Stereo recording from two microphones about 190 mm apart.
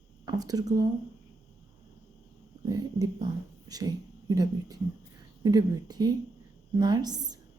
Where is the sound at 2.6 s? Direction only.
20° right (ahead or behind).